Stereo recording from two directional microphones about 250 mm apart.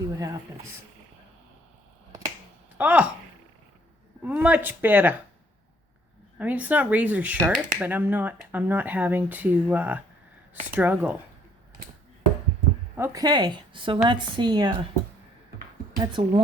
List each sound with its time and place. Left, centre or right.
0.1 s speech: centre
2.7 s speech: centre
4.2 s speech: centre
6.4 s speech: centre
13.0 s speech: centre
16.0 s speech: centre